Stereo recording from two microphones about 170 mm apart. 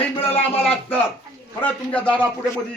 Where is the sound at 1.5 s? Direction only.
10° left (ahead or behind).